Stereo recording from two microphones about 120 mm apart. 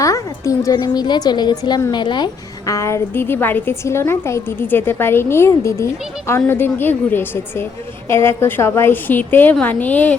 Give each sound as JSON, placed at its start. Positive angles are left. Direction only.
{"t": 0.0, "sound": "speech", "side_deg": 25}
{"t": 0.8, "sound": "a woman's voice", "side_deg": 40}
{"t": 2.7, "sound": "a woman's voice", "side_deg": 25}